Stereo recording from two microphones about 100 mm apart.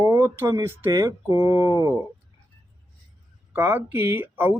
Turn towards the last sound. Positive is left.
turn(degrees=-20)  # may be behind; listen again after turning